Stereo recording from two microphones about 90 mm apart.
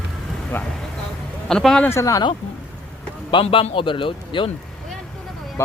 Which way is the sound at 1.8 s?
30° left (ahead or behind).